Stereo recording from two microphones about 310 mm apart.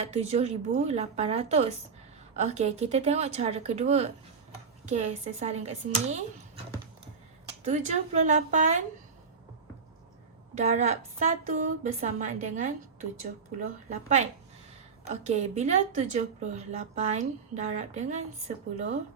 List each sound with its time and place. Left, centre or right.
0.0 s speech: centre
7.6 s speech: right
10.6 s speech: right
13.9 s speech: right